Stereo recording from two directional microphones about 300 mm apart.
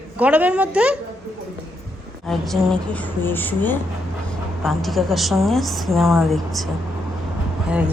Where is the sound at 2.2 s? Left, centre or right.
Centre.